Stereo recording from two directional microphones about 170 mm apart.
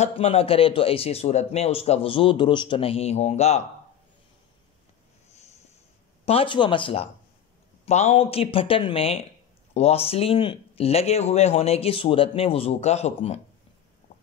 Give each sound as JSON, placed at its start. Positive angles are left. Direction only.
{"t": 0.0, "sound": "a man's voice", "side_deg": 35}
{"t": 6.2, "sound": "a man's voice", "side_deg": 35}